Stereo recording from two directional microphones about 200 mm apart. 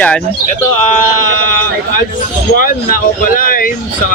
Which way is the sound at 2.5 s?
45° left (ahead or behind).